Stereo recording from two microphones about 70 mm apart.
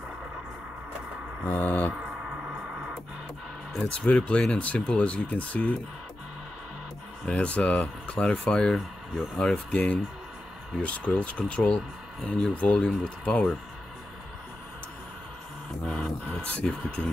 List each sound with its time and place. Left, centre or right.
1.4 s speech: left
2.0 s music: centre
3.9 s speech: centre
7.2 s speech: centre
9.4 s speech: centre
15.8 s music: centre